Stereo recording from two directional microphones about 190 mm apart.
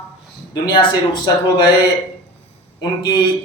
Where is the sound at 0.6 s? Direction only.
20° left (ahead or behind).